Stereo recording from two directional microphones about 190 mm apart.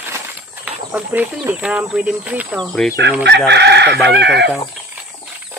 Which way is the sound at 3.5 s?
60° right (ahead or behind).